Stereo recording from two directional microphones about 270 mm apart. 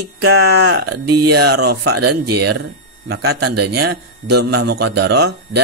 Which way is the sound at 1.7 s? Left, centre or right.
Right.